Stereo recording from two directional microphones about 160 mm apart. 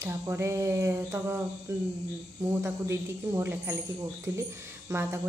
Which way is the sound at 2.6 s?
15° right (ahead or behind).